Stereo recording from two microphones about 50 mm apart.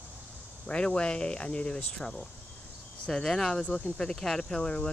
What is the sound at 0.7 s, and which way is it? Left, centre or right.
Speech, left.